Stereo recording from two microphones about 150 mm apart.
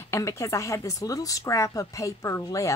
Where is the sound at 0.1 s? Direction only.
20° left (ahead or behind).